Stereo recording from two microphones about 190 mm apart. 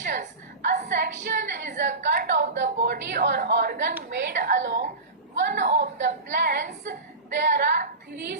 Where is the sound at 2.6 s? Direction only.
60° right (ahead or behind).